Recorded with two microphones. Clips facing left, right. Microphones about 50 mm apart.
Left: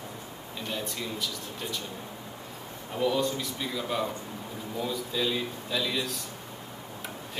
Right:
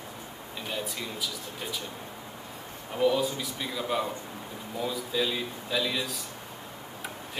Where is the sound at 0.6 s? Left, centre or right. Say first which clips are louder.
Even; centre.